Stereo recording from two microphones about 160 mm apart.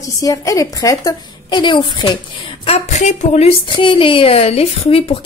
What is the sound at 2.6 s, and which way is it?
A woman's voice, 45° left (ahead or behind).